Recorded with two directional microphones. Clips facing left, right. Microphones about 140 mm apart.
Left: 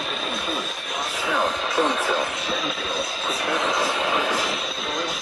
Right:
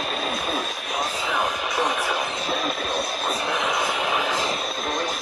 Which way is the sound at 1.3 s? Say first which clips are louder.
Left 3 dB; 15° right (ahead or behind).